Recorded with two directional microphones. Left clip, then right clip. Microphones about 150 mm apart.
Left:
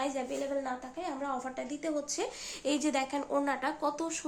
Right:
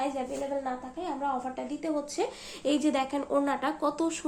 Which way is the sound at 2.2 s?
10° left (ahead or behind).